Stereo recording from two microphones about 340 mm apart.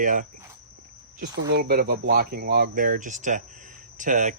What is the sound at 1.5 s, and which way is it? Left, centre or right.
Speech, right.